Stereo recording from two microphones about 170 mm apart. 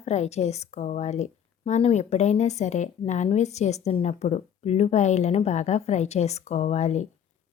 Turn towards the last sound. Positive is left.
turn(degrees=40)  # may be behind; listen again after turning